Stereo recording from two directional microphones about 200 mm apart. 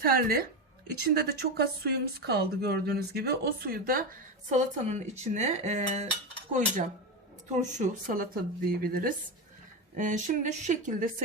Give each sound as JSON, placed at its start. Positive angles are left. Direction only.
{"t": 0.0, "sound": "speech", "side_deg": -45}